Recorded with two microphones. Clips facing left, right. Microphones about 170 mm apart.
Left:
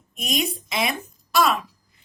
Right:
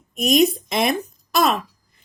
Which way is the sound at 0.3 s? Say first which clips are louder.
Right 8 dB; 45° right (ahead or behind).